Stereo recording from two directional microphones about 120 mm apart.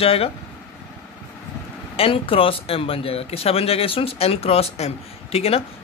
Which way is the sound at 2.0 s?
50° left (ahead or behind).